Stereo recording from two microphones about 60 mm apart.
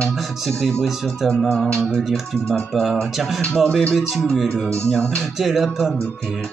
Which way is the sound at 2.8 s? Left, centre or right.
Centre.